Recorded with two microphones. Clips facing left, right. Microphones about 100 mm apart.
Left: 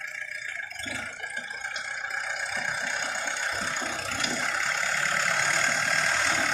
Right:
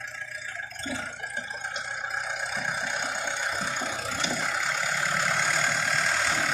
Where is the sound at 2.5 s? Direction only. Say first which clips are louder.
Right 1 dB; 15° right (ahead or behind).